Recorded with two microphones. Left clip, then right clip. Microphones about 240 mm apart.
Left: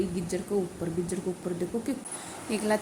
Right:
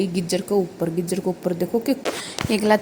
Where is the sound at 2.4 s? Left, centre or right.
Right.